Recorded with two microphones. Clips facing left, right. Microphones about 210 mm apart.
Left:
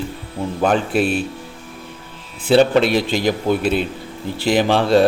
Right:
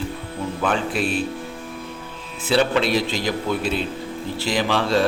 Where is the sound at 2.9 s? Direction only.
55° left (ahead or behind).